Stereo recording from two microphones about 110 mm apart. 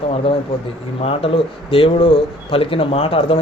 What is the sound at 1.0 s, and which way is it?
Speech, 60° left (ahead or behind).